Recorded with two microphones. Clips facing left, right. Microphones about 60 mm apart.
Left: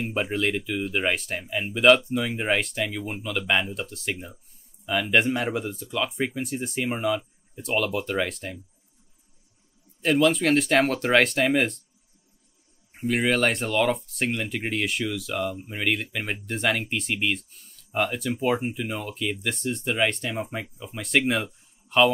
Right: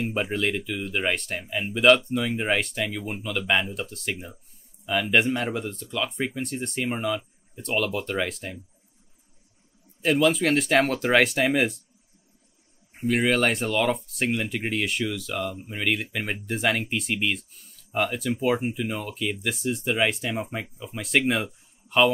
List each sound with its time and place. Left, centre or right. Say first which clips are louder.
0.0 s speech: even; centre
10.0 s speech: even; centre
12.9 s speech: right 1 dB; centre